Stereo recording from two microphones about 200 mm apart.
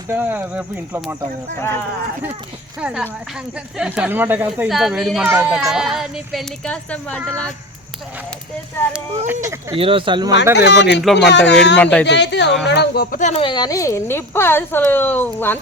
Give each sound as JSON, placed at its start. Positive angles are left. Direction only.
{"t": 0.1, "sound": "speech", "side_deg": -10}
{"t": 2.8, "sound": "speech", "side_deg": -5}
{"t": 8.9, "sound": "speech", "side_deg": -10}
{"t": 9.7, "sound": "speech", "side_deg": -25}
{"t": 10.5, "sound": "speech", "side_deg": 60}
{"t": 11.8, "sound": "speech", "side_deg": 5}
{"t": 12.0, "sound": "speech", "side_deg": 60}